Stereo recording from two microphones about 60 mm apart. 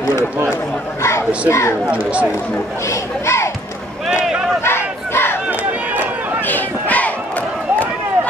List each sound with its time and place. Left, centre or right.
1.5 s speech: left
2.9 s speech: left
4.6 s battle cry: left
6.4 s a sound: left